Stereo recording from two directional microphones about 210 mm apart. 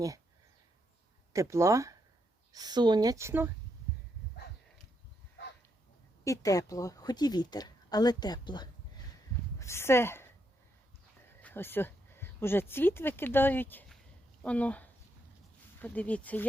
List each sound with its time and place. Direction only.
1.3 s a woman's voice: 15° right (ahead or behind)
6.2 s a woman's voice: 15° left (ahead or behind)
11.3 s speech: 10° left (ahead or behind)